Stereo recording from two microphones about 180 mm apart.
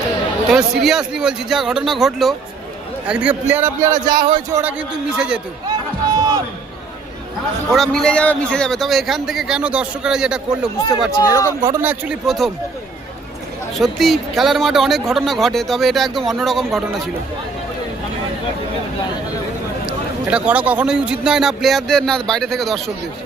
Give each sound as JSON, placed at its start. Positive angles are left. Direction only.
{"t": 0.4, "sound": "a man's voice", "side_deg": -5}
{"t": 4.6, "sound": "a man's voice", "side_deg": -5}
{"t": 7.7, "sound": "a man's voice", "side_deg": 0}
{"t": 11.1, "sound": "speech", "side_deg": 20}
{"t": 11.6, "sound": "a man's voice", "side_deg": -15}
{"t": 13.7, "sound": "a man's voice", "side_deg": 0}
{"t": 20.3, "sound": "a man's voice", "side_deg": -10}